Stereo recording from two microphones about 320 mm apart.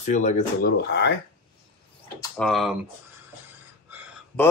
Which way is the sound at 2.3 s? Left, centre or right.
Centre.